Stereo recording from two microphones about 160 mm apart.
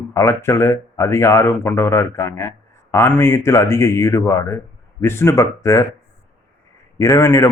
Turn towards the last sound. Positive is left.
turn(degrees=15)  # may be behind; listen again after turning